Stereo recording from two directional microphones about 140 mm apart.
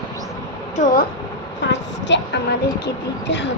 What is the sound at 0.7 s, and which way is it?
Speech, 65° left (ahead or behind).